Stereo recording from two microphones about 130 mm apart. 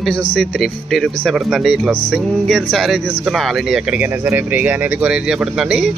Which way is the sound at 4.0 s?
15° right (ahead or behind).